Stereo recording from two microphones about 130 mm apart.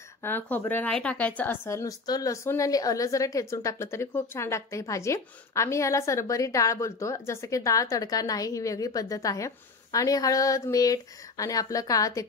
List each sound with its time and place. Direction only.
0.2 s speech: 15° left (ahead or behind)